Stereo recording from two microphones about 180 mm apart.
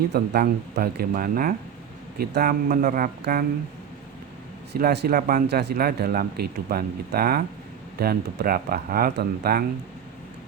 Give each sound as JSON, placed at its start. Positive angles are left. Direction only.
{"t": 0.1, "sound": "speech", "side_deg": -60}
{"t": 4.7, "sound": "speech", "side_deg": -65}